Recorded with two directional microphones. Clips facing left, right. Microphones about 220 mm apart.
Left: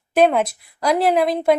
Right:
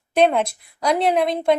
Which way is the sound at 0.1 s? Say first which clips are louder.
Left 1 dB; 5° left (ahead or behind).